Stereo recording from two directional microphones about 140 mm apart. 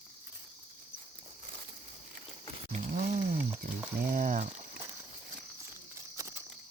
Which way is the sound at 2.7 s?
55° right (ahead or behind).